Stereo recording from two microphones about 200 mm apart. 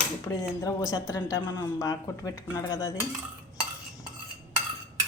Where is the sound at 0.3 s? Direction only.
15° left (ahead or behind).